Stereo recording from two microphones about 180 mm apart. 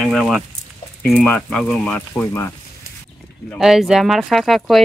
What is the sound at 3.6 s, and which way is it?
Speech, centre (ahead or behind).